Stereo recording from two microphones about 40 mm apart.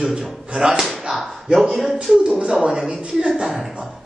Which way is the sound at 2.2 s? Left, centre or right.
Right.